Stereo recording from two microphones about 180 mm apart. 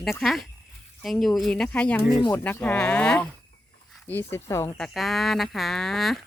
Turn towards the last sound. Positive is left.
turn(degrees=0)  # may be behind; listen again after turning